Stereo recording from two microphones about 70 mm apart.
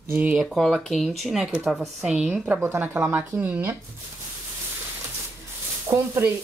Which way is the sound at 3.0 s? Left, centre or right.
Right.